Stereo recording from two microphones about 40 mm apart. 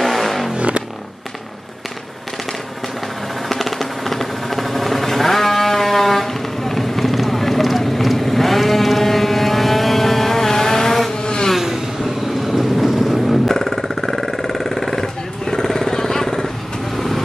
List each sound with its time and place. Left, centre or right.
0.0 s vehicle: centre
0.6 s a sound: right
3.4 s a sound: centre
11.2 s vehicle: left
12.4 s vehicle: centre
15.4 s jackhammer: centre
16.9 s vehicle: centre